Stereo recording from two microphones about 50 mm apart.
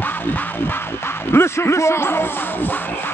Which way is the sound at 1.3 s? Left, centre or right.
Left.